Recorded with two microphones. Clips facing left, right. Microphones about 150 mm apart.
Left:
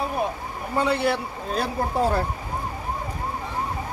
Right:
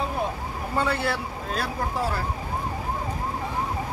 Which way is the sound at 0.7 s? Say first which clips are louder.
Left 4 dB; 20° left (ahead or behind).